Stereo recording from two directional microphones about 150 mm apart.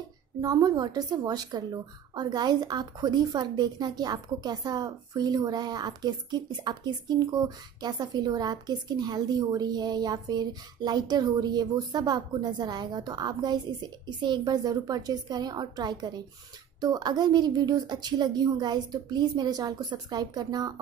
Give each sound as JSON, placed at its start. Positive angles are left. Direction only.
{"t": 0.4, "sound": "a woman's voice", "side_deg": -25}